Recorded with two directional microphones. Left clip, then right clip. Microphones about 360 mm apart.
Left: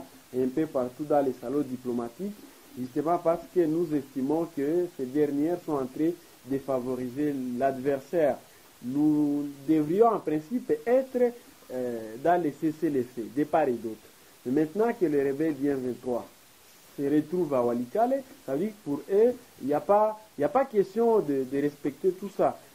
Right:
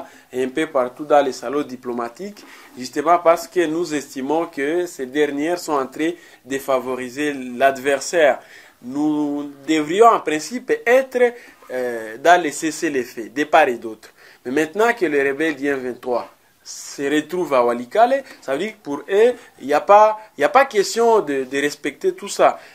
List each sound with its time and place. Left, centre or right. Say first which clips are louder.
0.4 s speech: right 8 dB; centre
9.7 s speech: right 10 dB; centre